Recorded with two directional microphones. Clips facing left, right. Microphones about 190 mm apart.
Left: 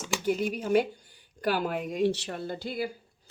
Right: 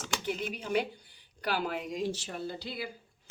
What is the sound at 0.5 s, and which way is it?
Speech, 45° left (ahead or behind).